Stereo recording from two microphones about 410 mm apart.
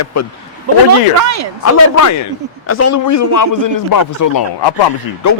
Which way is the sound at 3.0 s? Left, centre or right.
Left.